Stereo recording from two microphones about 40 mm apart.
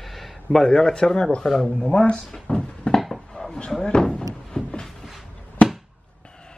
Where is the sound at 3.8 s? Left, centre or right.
Centre.